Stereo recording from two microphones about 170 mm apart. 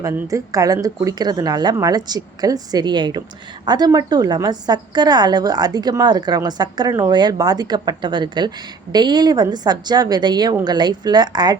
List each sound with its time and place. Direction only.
0.0 s a woman's voice: 20° right (ahead or behind)